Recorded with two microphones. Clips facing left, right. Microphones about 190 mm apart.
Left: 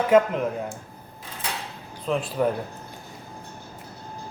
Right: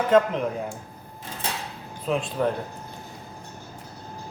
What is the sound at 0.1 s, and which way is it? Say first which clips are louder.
Speech: left 1 dB; 10° left (ahead or behind).